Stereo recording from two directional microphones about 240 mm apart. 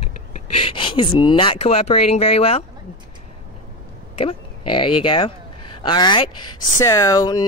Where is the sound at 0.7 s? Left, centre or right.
Centre.